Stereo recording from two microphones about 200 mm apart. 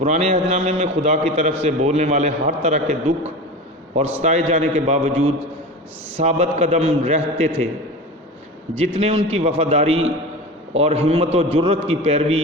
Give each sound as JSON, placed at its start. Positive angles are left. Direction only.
{"t": 0.0, "sound": "a man's voice", "side_deg": -35}
{"t": 8.8, "sound": "a man's voice", "side_deg": -30}